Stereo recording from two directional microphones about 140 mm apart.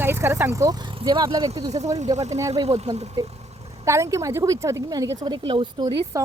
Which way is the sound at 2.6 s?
50° right (ahead or behind).